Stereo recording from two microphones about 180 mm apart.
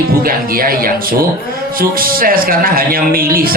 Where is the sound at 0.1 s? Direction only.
55° right (ahead or behind).